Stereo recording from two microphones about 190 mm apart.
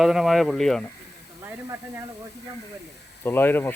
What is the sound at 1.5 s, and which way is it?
Speech, 15° right (ahead or behind).